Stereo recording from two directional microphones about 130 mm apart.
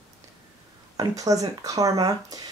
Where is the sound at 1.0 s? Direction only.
25° right (ahead or behind).